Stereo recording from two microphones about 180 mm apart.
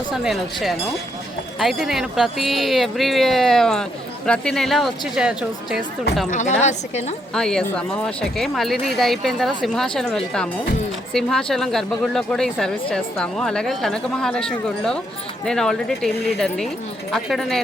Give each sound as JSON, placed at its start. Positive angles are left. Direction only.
{"t": 0.1, "sound": "speech", "side_deg": 0}
{"t": 6.3, "sound": "a woman's voice", "side_deg": 40}
{"t": 7.3, "sound": "speech", "side_deg": 5}